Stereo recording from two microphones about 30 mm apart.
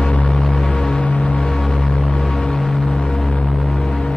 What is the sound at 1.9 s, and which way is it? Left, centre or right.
Music, left.